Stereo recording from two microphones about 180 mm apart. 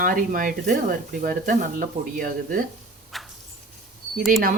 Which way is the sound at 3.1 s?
Centre (ahead or behind).